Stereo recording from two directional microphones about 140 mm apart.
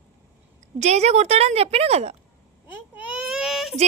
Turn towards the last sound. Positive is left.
turn(degrees=0)  # may be behind; listen again after turning